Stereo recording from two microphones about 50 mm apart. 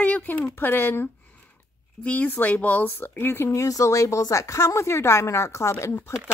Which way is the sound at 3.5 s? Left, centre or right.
Left.